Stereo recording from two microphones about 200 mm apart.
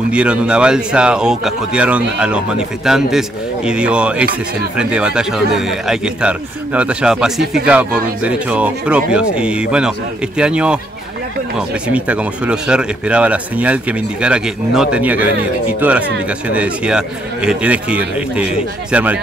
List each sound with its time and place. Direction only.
0.1 s speech: 5° right (ahead or behind)
11.9 s speech: 5° right (ahead or behind)